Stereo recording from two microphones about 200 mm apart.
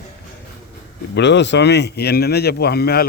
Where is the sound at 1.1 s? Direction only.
60° left (ahead or behind).